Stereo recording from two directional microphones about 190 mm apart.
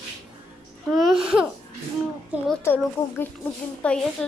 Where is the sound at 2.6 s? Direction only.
10° left (ahead or behind).